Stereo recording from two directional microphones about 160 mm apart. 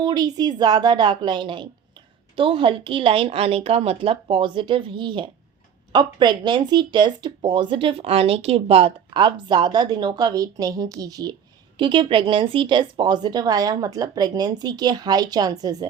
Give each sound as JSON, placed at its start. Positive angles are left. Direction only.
{"t": 0.0, "sound": "a woman's voice", "side_deg": -25}